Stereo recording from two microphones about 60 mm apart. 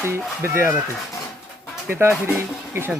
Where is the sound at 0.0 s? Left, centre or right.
Right.